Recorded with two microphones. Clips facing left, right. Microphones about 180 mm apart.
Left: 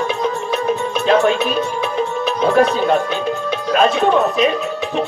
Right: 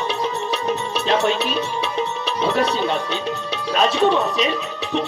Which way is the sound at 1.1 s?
50° left (ahead or behind).